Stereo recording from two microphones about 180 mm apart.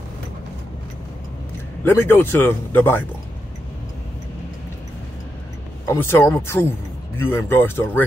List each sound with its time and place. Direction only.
1.9 s speech: 15° left (ahead or behind)
5.9 s speech: 10° left (ahead or behind)